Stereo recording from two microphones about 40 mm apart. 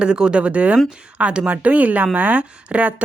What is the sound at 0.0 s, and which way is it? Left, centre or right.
Speech, right.